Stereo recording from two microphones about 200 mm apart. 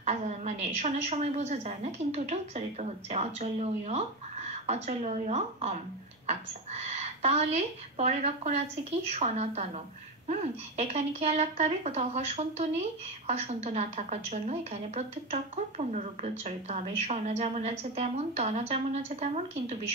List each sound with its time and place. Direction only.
0.0 s a woman's voice: 35° right (ahead or behind)